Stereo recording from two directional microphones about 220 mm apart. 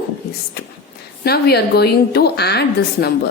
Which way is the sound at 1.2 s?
45° left (ahead or behind).